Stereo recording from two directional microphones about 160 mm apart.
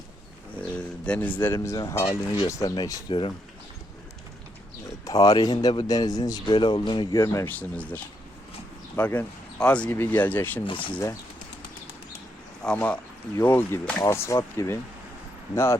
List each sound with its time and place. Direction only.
0.8 s speech: 5° left (ahead or behind); by 3.2 s 25° left (ahead or behind)
5.0 s speech: 25° left (ahead or behind)
12.6 s speech: 10° left (ahead or behind)